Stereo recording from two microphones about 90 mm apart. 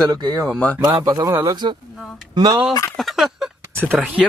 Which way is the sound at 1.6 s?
60° right (ahead or behind).